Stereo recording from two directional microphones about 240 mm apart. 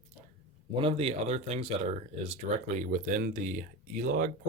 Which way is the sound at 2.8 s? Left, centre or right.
Right.